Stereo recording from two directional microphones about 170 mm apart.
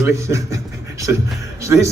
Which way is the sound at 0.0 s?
15° right (ahead or behind).